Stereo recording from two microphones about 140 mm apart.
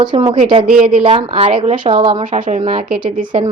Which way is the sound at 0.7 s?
5° right (ahead or behind).